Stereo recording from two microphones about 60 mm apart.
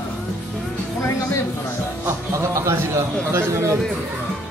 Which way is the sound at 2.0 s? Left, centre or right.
Right.